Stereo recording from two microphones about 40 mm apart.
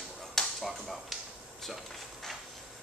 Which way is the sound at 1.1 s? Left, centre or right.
Centre.